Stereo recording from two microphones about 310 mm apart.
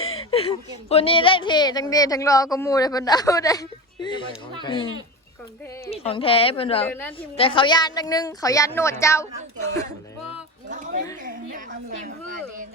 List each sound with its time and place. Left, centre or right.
0.0 s speech: centre
5.9 s speech: centre
6.8 s speech: centre
7.2 s speech: centre
10.7 s a woman's voice: right